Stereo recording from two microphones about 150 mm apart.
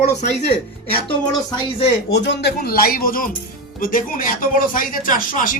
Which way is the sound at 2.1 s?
90° left.